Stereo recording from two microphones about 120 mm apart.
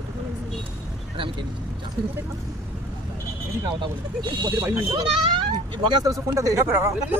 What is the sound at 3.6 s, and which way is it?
Speech, 40° right (ahead or behind).